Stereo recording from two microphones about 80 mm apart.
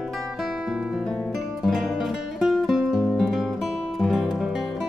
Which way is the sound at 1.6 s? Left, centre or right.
Centre.